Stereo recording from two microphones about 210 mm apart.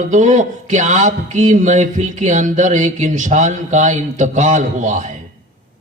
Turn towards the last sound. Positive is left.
turn(degrees=-35)  # may be behind; listen again after turning